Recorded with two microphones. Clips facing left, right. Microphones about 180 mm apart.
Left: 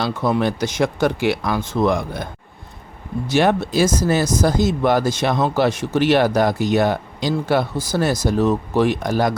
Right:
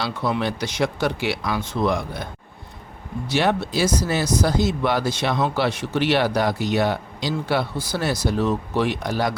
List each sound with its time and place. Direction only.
0.0 s speech: 45° left (ahead or behind)
3.2 s speech: 50° left (ahead or behind)